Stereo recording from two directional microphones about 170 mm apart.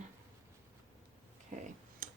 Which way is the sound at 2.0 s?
55° right (ahead or behind).